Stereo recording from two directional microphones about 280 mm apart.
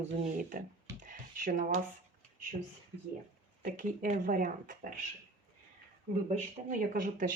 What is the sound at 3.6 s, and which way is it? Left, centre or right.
Speech, right.